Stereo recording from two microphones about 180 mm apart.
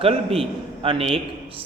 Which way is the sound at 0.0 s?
30° right (ahead or behind).